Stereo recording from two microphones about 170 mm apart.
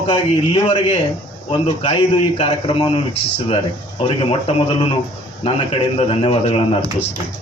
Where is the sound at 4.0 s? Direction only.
35° left (ahead or behind).